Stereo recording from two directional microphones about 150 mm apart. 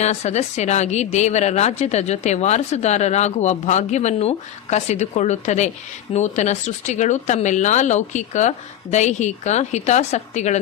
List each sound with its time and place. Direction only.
0.0 s a woman's voice: 50° left (ahead or behind)